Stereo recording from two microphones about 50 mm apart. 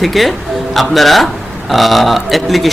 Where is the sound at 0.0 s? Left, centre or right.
Centre.